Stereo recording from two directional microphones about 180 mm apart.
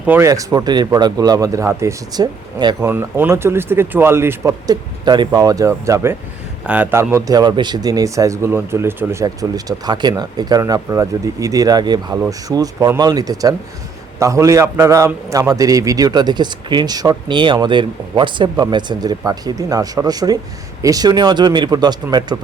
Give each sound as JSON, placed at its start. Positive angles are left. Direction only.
{"t": 0.0, "sound": "a man's voice", "side_deg": -10}
{"t": 2.8, "sound": "a man's voice", "side_deg": -10}